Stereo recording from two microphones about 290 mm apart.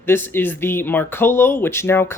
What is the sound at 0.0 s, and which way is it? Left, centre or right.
Speech, centre.